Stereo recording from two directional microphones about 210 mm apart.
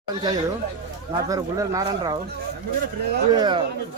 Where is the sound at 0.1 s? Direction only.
20° right (ahead or behind).